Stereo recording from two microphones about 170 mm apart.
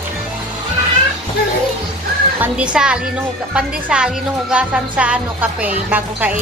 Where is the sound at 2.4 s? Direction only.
5° right (ahead or behind).